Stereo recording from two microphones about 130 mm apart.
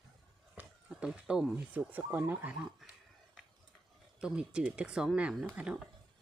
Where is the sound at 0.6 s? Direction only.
10° right (ahead or behind).